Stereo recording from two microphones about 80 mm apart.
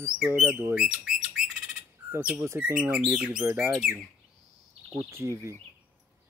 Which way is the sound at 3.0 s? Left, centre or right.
Centre.